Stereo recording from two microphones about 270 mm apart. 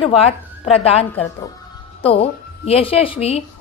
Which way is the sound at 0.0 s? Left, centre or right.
Left.